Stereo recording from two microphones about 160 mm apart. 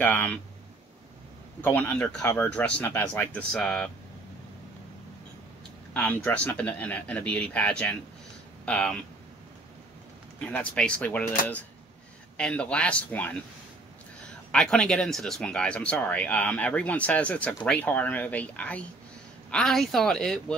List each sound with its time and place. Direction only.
0.0 s speech: 10° left (ahead or behind)
1.6 s speech: 10° left (ahead or behind)
5.9 s speech: 10° left (ahead or behind)
10.5 s speech: 5° left (ahead or behind)